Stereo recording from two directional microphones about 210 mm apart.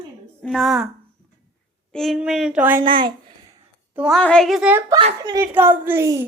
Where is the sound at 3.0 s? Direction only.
20° right (ahead or behind).